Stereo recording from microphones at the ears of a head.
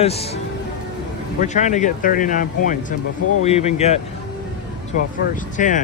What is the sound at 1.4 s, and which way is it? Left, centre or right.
Speech, left.